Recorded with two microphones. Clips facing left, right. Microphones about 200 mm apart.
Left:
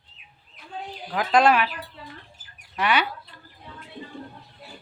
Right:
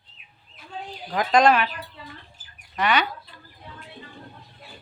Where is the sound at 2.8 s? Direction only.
10° left (ahead or behind).